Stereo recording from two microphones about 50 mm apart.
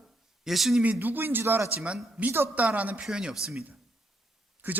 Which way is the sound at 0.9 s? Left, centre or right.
Right.